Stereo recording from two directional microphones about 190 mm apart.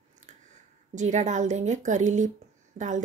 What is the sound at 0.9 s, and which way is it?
Speech, 40° right (ahead or behind).